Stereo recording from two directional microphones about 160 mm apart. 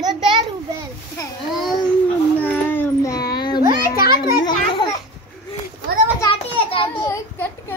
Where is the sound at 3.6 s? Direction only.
65° left (ahead or behind).